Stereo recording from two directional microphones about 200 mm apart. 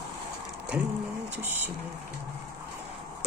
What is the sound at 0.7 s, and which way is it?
Speech, 10° right (ahead or behind).